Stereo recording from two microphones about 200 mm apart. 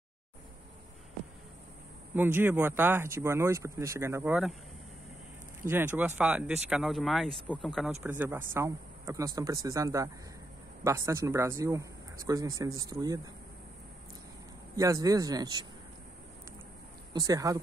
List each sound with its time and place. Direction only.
2.1 s speech: 10° right (ahead or behind)
5.7 s speech: 10° right (ahead or behind)
8.0 s speech: 10° right (ahead or behind)
14.8 s speech: 15° right (ahead or behind)
17.1 s speech: 20° right (ahead or behind)